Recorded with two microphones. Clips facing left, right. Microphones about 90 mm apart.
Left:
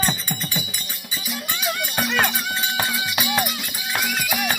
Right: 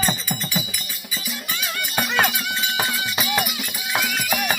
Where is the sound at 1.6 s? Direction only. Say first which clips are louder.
Left 1 dB; centre (ahead or behind).